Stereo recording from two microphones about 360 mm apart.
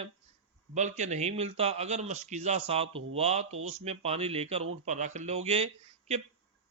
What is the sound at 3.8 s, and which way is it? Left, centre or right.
Speech, centre.